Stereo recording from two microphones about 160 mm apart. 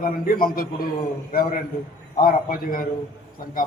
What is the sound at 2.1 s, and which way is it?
Speech, 60° left (ahead or behind).